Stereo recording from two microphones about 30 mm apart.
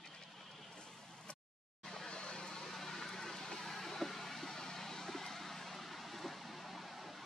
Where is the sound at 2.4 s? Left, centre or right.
Centre.